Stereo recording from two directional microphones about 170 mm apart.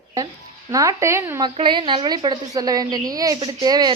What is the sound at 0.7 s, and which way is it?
A woman's voice, 20° right (ahead or behind).